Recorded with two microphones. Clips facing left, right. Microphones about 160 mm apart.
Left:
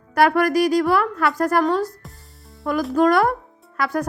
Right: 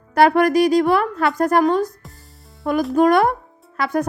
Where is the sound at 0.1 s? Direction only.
25° right (ahead or behind).